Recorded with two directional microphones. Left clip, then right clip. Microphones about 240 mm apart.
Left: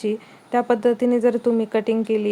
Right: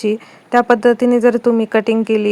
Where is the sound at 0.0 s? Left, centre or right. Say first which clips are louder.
Right 6 dB; centre.